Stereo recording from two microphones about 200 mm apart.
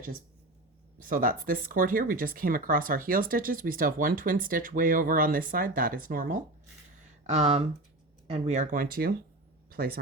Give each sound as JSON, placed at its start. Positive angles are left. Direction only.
{"t": 1.0, "sound": "speech", "side_deg": -45}
{"t": 7.3, "sound": "speech", "side_deg": -35}